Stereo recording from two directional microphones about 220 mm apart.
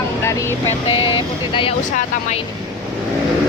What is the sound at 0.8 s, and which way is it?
Speech, 25° left (ahead or behind).